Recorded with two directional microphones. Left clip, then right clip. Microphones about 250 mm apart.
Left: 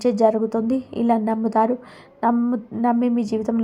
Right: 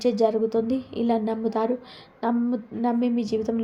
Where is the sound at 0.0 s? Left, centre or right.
Centre.